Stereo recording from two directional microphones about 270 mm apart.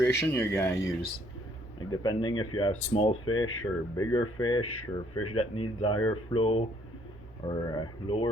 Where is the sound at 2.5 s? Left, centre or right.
Left.